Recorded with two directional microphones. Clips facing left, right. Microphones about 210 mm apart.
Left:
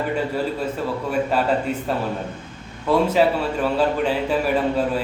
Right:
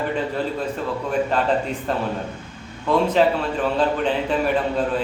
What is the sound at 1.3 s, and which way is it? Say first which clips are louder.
Speech: left 1 dB; 10° left (ahead or behind).